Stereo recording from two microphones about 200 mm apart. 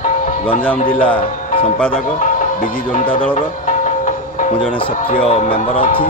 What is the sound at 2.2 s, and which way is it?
Music, 40° left (ahead or behind).